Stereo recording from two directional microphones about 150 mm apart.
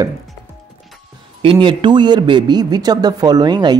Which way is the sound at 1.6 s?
30° right (ahead or behind).